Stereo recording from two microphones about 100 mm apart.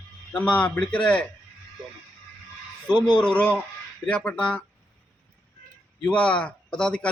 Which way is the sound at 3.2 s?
15° left (ahead or behind).